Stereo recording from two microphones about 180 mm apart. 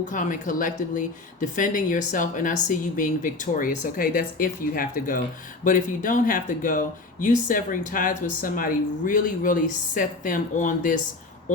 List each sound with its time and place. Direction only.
0.0 s speech: 45° left (ahead or behind)